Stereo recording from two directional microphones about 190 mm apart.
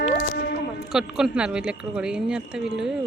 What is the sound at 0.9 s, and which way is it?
Speech, 5° right (ahead or behind).